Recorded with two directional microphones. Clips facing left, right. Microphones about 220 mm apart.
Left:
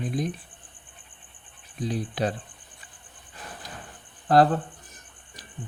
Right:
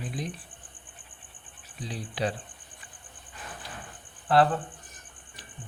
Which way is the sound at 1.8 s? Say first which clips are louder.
Left 5 dB; 45° left (ahead or behind).